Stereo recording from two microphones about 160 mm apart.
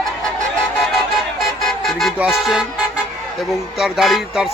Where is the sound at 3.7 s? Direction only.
Centre (ahead or behind).